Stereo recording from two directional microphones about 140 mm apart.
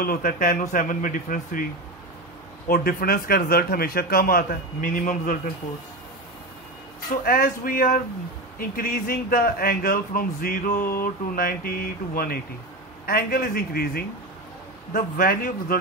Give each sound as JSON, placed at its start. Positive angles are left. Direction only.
{"t": 0.0, "sound": "speech", "side_deg": 90}
{"t": 2.7, "sound": "speech", "side_deg": 90}
{"t": 7.2, "sound": "speech", "side_deg": 90}